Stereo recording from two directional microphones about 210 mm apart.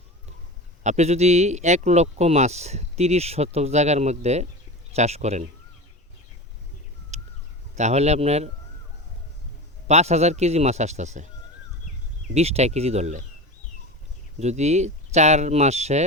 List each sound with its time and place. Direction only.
0.9 s speech: 30° right (ahead or behind)
7.1 s a sound: 30° right (ahead or behind)
7.8 s speech: 30° right (ahead or behind)
9.8 s speech: 30° right (ahead or behind)
12.3 s speech: 30° right (ahead or behind)
14.3 s speech: 30° right (ahead or behind)